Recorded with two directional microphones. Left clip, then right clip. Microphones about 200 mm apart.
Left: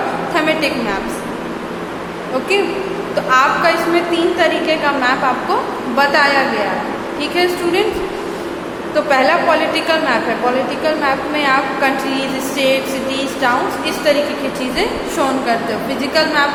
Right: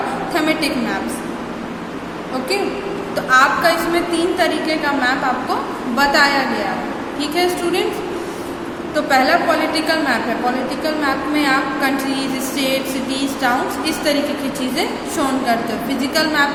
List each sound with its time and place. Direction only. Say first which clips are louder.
0.3 s a woman's voice: left 3 dB; 10° right (ahead or behind)
3.2 s a woman's voice: left 1 dB; 10° right (ahead or behind)
9.0 s a woman's voice: left 1 dB; 10° right (ahead or behind)